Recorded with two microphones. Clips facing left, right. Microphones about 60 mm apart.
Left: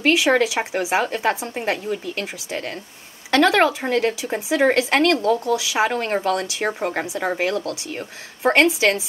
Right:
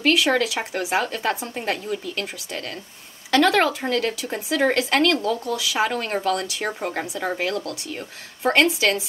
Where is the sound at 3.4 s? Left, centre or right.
Centre.